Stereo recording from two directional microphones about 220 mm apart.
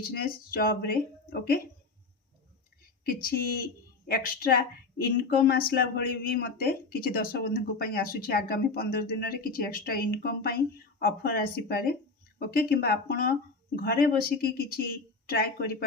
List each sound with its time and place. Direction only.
0.0 s speech: 45° left (ahead or behind)
3.0 s speech: 40° left (ahead or behind)